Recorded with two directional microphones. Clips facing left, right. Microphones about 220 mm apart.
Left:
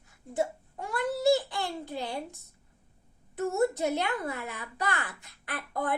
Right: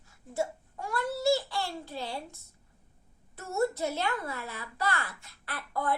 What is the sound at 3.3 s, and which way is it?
Speech, 15° left (ahead or behind).